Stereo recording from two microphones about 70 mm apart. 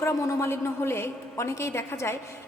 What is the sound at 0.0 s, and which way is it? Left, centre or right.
A woman's voice, left.